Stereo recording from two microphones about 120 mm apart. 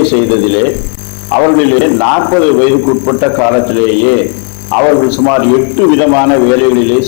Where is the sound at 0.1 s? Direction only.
10° left (ahead or behind).